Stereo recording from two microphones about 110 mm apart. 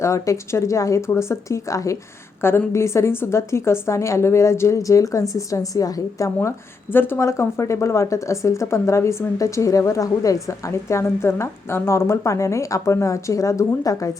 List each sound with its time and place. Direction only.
0.0 s a woman's voice: 25° left (ahead or behind)